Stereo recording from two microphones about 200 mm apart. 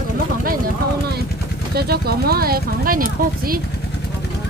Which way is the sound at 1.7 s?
50° right (ahead or behind).